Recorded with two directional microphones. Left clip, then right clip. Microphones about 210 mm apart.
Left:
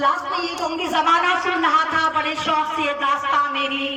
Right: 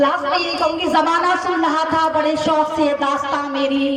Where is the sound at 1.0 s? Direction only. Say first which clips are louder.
Right 1 dB; 35° right (ahead or behind).